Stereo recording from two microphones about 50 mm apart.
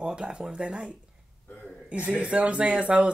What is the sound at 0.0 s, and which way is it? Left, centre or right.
Speech, centre.